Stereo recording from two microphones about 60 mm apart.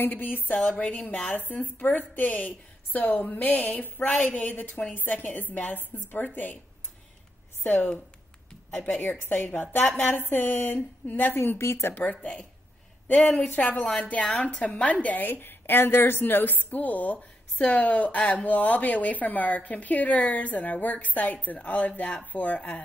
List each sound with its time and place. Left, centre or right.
0.0 s a woman's voice: left
0.7 s a woman's voice: centre
7.6 s a woman's voice: left
9.2 s a woman's voice: left
11.9 s a woman's voice: left